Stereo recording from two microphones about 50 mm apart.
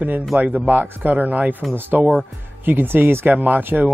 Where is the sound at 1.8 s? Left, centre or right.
Right.